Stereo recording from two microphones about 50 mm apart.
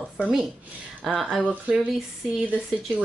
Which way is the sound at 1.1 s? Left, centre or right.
Centre.